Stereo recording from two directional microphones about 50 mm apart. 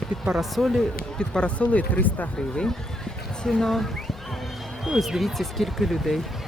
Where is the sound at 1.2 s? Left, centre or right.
Centre; by 2.3 s left.